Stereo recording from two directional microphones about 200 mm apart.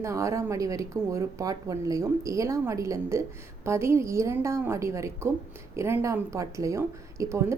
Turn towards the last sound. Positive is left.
turn(degrees=-15)  # may be behind; listen again after turning